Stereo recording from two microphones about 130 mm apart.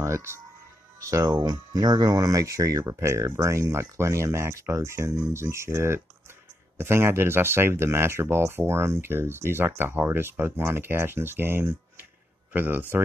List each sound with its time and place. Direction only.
0.0 s speech: 20° right (ahead or behind)